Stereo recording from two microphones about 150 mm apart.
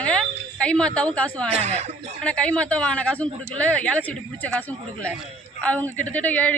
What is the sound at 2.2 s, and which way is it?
Speech, 10° left (ahead or behind).